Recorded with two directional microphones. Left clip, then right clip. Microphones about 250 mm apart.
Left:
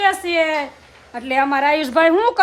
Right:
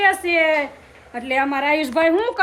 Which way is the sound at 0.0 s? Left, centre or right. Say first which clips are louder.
Even; centre.